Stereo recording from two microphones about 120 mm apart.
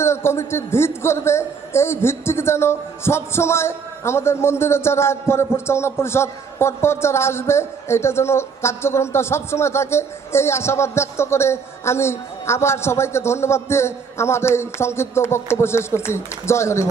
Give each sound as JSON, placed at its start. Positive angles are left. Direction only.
{"t": 0.0, "sound": "a man's voice", "side_deg": 20}